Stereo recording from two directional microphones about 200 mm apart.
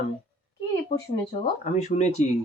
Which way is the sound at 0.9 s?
35° left (ahead or behind).